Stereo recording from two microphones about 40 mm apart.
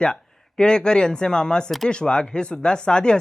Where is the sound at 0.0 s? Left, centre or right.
Left.